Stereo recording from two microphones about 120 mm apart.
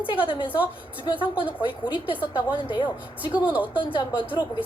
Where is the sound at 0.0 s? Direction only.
45° left (ahead or behind).